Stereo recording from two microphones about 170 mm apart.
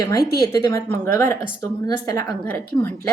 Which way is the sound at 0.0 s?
20° left (ahead or behind).